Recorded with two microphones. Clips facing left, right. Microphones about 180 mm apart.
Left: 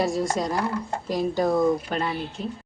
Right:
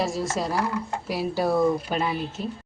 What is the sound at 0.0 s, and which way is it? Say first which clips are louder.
Speech: left 2 dB; centre (ahead or behind).